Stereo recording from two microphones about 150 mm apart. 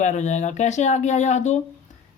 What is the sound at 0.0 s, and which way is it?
Speech, 50° left (ahead or behind).